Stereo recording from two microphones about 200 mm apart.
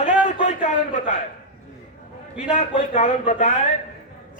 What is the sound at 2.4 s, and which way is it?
A man's voice, 35° left (ahead or behind).